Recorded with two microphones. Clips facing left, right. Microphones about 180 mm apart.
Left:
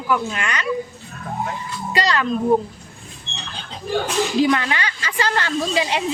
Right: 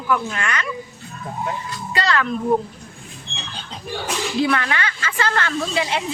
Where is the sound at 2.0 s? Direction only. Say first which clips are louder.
Even; 15° left (ahead or behind).